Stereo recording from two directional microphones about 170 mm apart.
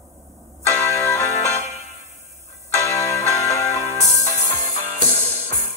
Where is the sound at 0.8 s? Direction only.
15° left (ahead or behind).